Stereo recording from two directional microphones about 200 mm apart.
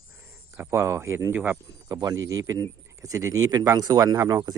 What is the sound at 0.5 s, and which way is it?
Speech, 15° right (ahead or behind).